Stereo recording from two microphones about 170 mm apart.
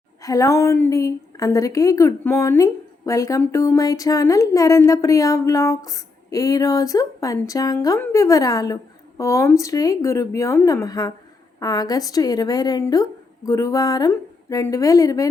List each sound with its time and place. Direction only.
0.2 s speech: 20° left (ahead or behind)